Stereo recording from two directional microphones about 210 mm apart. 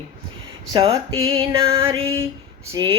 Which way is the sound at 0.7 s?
25° right (ahead or behind).